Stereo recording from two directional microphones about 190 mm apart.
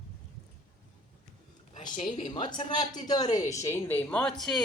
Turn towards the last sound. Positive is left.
turn(degrees=0)  # may be behind; listen again after turning